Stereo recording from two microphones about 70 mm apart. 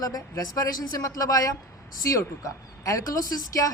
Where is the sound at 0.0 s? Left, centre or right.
Left.